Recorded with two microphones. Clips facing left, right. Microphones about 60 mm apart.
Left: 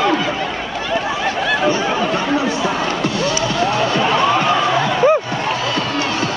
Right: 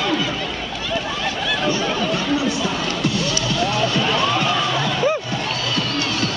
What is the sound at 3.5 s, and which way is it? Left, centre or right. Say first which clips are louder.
Music: left 2 dB; left.